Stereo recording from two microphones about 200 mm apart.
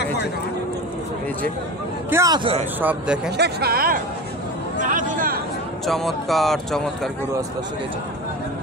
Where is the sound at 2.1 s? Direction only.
15° right (ahead or behind).